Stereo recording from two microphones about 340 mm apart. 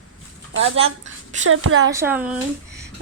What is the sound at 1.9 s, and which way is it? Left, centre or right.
Speech, centre.